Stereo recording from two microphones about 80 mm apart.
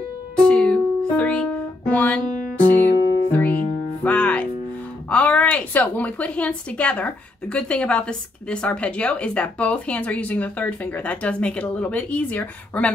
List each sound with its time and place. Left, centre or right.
0.4 s music: centre
5.1 s a woman's voice: centre